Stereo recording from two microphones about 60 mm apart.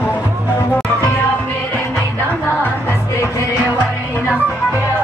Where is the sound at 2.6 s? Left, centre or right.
Left.